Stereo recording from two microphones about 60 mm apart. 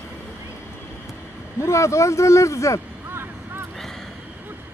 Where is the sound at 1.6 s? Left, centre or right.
Left.